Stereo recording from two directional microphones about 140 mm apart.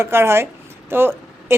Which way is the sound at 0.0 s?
20° right (ahead or behind).